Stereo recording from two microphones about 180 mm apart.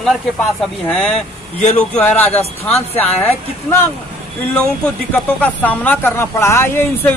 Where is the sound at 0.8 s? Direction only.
5° left (ahead or behind).